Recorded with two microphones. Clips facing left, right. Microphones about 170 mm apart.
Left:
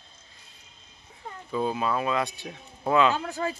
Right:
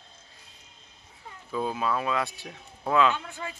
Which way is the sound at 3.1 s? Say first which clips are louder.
Left 8 dB; 40° left (ahead or behind).